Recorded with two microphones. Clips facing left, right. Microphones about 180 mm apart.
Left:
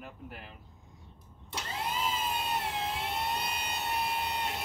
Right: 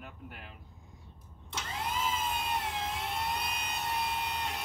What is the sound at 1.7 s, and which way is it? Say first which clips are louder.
Emergency vehicle: even; centre (ahead or behind).